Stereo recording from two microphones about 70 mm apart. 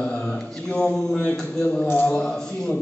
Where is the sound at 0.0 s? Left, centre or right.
Centre.